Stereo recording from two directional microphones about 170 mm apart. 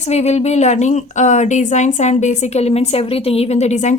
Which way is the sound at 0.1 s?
40° left (ahead or behind).